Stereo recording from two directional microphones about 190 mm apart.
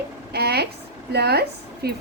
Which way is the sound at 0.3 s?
60° right (ahead or behind).